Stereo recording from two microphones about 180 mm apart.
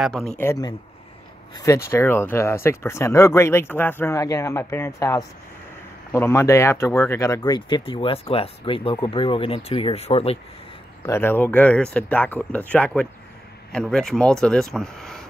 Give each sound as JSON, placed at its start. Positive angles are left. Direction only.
{"t": 0.0, "sound": "a man's voice", "side_deg": 5}
{"t": 0.4, "sound": "speech", "side_deg": 15}
{"t": 11.1, "sound": "speech", "side_deg": 10}